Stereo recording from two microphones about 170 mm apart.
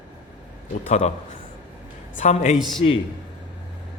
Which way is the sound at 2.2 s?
45° left (ahead or behind).